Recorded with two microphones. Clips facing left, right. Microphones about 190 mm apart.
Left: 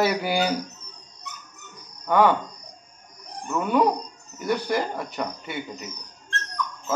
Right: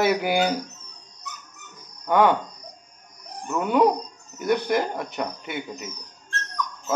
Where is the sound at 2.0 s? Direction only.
15° right (ahead or behind).